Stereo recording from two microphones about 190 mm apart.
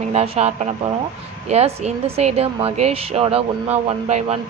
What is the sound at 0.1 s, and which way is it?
Speech, 35° right (ahead or behind).